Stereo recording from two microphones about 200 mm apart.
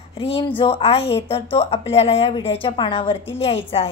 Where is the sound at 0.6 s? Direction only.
30° left (ahead or behind).